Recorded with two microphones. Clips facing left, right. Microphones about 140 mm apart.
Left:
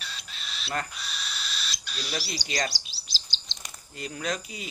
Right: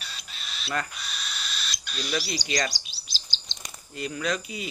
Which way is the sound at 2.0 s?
50° right (ahead or behind).